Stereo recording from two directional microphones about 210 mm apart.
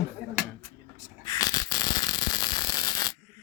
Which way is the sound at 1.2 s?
20° left (ahead or behind).